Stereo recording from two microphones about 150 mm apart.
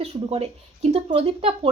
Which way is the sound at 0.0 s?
45° right (ahead or behind).